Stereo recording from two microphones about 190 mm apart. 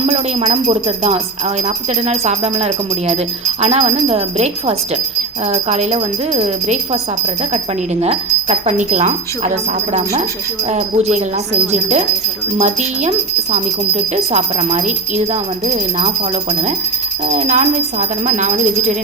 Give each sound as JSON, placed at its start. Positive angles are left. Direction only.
{"t": 0.0, "sound": "speech", "side_deg": -30}
{"t": 8.0, "sound": "speech", "side_deg": -35}